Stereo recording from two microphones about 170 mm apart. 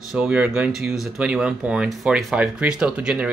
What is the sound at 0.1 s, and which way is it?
Speech, 5° right (ahead or behind).